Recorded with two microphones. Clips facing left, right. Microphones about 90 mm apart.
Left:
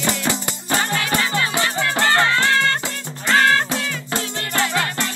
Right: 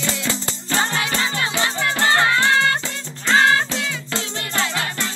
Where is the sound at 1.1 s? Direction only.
20° right (ahead or behind).